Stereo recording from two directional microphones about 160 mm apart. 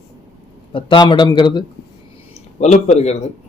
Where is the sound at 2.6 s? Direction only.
45° left (ahead or behind).